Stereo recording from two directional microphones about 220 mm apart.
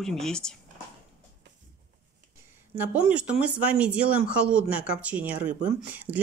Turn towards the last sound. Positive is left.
turn(degrees=-5)  # may be behind; listen again after turning